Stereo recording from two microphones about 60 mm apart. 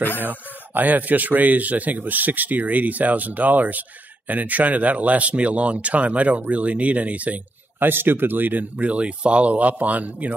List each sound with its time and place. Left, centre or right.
0.2 s a man's voice: right
7.9 s a man's voice: right